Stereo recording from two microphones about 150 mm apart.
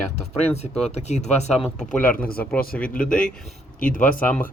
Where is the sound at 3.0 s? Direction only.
5° left (ahead or behind).